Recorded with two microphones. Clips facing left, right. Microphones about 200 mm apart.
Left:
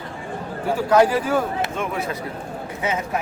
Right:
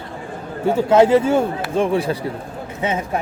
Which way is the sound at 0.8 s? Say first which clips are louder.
Right 4 dB; 25° right (ahead or behind).